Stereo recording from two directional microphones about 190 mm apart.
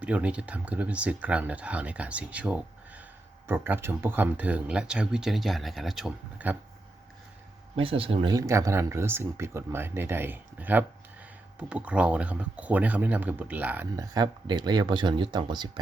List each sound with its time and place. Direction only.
0.0 s speech: 5° right (ahead or behind)
7.8 s speech: 30° right (ahead or behind); by 13.8 s 10° right (ahead or behind)
14.0 s speech: 20° right (ahead or behind)